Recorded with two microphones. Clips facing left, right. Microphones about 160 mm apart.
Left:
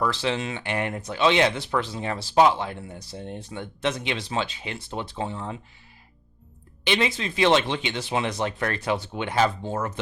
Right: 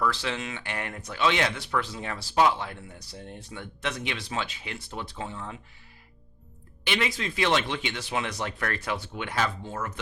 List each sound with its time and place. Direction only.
0.0 s speech: 25° left (ahead or behind)
6.8 s speech: 25° left (ahead or behind)